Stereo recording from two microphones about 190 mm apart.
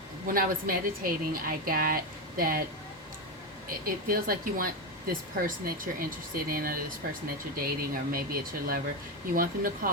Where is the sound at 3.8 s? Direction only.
50° right (ahead or behind).